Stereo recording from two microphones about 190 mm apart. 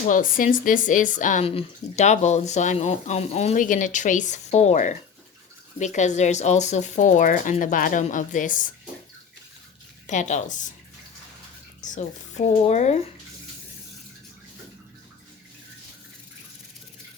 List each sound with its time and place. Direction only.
0.1 s speech: 45° left (ahead or behind)
10.1 s speech: 40° left (ahead or behind)
11.9 s speech: 40° left (ahead or behind)